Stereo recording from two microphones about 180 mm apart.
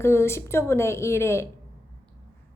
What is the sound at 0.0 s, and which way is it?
A woman's voice, 15° left (ahead or behind).